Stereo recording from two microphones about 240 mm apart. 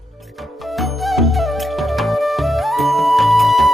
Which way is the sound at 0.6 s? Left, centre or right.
Centre.